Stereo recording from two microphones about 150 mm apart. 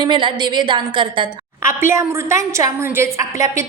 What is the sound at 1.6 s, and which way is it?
A woman's voice, 15° right (ahead or behind).